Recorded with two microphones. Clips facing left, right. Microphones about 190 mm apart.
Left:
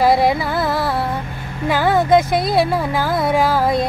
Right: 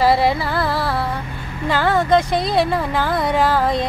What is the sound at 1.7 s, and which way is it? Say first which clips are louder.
Speech: left 2 dB; 10° left (ahead or behind).